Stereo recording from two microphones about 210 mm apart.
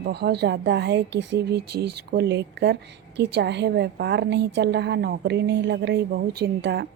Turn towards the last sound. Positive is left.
turn(degrees=-50)  # may be behind; listen again after turning